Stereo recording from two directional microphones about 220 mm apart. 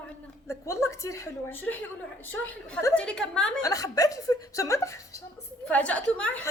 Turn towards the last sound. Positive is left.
turn(degrees=5)  # may be behind; listen again after turning